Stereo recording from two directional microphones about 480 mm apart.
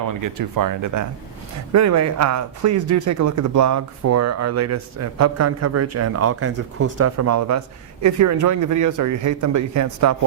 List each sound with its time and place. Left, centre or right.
0.1 s speech: right